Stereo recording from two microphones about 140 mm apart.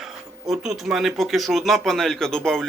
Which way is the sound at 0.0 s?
Centre (ahead or behind).